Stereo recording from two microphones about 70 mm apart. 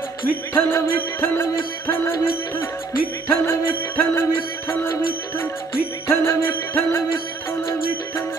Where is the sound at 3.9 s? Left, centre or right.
Left.